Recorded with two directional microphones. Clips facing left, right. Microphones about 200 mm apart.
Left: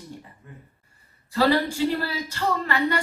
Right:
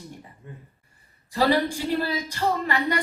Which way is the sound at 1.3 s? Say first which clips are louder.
Left 1 dB; 15° right (ahead or behind).